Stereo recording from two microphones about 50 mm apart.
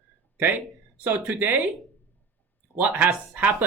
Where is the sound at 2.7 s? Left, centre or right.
Right.